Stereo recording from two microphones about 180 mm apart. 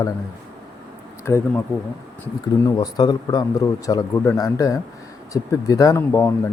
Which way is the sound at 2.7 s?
20° left (ahead or behind).